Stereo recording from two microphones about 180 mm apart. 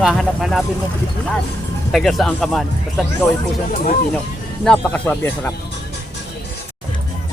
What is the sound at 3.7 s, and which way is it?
Speech, 45° left (ahead or behind).